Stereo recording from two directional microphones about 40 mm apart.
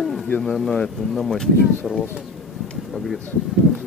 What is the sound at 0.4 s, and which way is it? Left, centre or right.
Speech, centre.